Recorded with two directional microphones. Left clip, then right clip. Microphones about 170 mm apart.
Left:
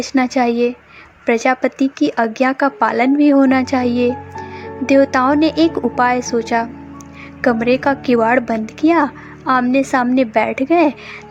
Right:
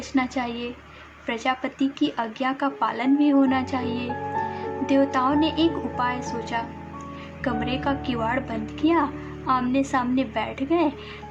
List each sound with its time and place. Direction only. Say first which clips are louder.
0.0 s speech: left 10 dB; 45° left (ahead or behind)